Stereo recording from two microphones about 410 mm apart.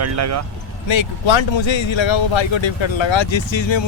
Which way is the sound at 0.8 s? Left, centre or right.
Left.